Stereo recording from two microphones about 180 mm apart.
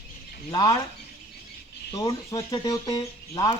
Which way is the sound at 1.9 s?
20° left (ahead or behind).